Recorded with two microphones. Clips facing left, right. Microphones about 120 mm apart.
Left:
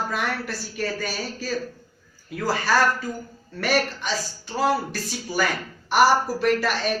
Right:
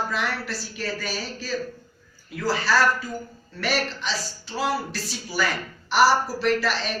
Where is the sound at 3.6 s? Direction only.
50° left (ahead or behind).